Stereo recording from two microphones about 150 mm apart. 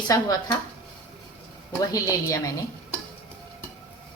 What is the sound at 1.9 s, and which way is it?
Speech, 25° left (ahead or behind).